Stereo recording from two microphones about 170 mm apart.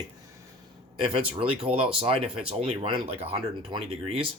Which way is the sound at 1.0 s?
30° right (ahead or behind).